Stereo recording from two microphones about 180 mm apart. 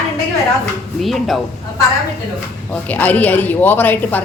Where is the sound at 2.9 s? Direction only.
10° left (ahead or behind).